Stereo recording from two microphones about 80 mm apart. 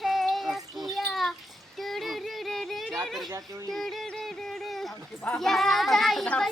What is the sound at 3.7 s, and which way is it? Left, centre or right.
Music, centre.